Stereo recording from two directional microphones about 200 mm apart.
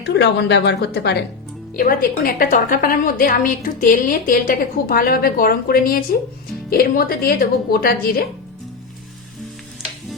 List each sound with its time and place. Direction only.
0.0 s a woman's voice: 55° left (ahead or behind)
1.7 s a woman's voice: 45° left (ahead or behind)